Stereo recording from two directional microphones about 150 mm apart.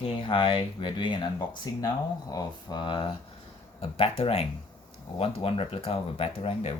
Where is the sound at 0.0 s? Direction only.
35° left (ahead or behind).